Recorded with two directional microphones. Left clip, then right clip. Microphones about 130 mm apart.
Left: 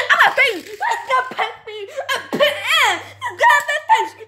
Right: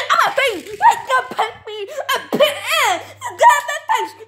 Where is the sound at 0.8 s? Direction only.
55° right (ahead or behind).